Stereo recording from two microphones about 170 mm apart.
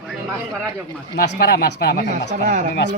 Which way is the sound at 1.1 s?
70° left (ahead or behind).